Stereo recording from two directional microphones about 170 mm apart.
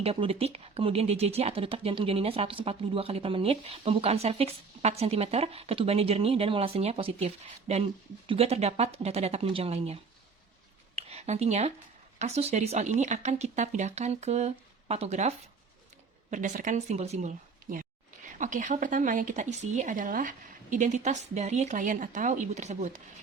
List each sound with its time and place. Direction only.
0.0 s speech: 35° right (ahead or behind)
10.9 s a sound: 40° right (ahead or behind)
12.2 s speech: 40° right (ahead or behind)
16.3 s speech: 50° right (ahead or behind)